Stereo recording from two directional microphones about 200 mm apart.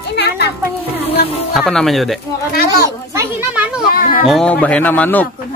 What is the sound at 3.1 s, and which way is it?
Children playing, 5° right (ahead or behind).